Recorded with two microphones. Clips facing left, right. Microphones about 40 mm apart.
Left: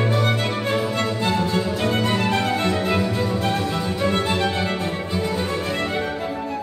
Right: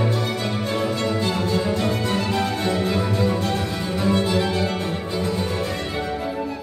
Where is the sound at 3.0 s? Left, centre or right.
Centre.